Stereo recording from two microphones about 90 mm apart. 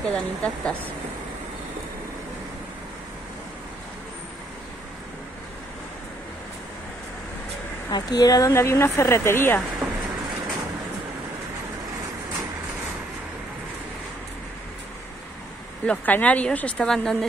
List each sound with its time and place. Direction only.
0.0 s speech: 10° left (ahead or behind)
7.9 s speech: 50° left (ahead or behind)
8.5 s speech: 30° left (ahead or behind)
9.8 s a sound: 10° right (ahead or behind)
15.8 s speech: 15° left (ahead or behind)